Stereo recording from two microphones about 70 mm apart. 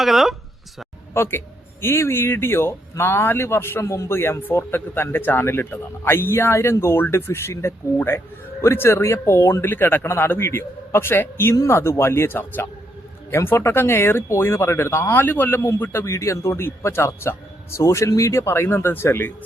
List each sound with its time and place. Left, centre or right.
0.0 s speech: centre
1.1 s speech: left